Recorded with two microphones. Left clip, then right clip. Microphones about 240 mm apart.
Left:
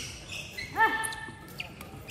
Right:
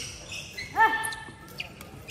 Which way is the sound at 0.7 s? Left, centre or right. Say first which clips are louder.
Right 3 dB; centre.